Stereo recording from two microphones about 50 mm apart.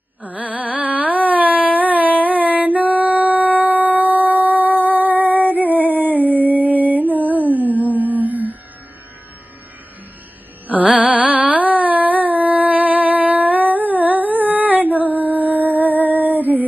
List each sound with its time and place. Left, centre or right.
0.2 s carnatic music: right
1.8 s a sound: right
2.2 s music: right
5.5 s a sound: right
5.9 s music: right
10.9 s carnatic music: right